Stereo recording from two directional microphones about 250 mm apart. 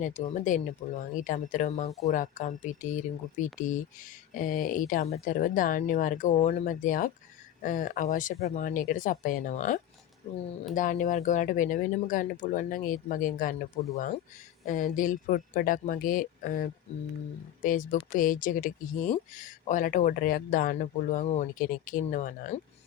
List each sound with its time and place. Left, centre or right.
0.0 s speech: left